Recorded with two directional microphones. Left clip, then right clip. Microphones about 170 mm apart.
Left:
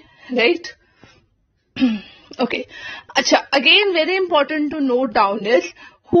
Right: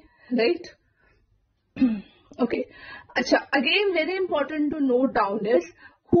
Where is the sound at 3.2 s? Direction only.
15° left (ahead or behind).